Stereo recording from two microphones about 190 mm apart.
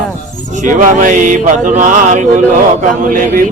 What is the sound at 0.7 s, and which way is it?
A man's voice, 45° right (ahead or behind).